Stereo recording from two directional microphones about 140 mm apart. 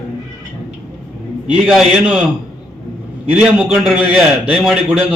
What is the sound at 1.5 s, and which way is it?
Speech, 5° right (ahead or behind).